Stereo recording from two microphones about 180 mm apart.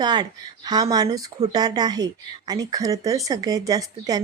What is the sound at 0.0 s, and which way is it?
Speech, 25° right (ahead or behind).